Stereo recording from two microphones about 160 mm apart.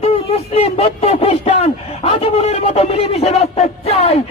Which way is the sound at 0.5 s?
40° left (ahead or behind).